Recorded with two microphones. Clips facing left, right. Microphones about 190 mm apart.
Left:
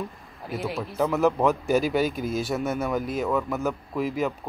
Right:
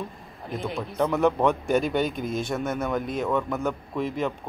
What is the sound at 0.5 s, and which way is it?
Speech, 5° left (ahead or behind).